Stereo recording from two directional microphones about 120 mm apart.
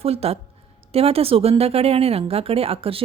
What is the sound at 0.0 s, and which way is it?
A woman's voice, 55° right (ahead or behind).